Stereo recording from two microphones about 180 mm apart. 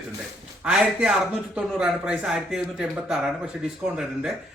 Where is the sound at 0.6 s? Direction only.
5° right (ahead or behind).